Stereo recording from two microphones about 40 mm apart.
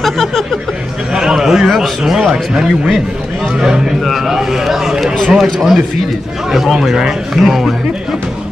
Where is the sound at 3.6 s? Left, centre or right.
Centre.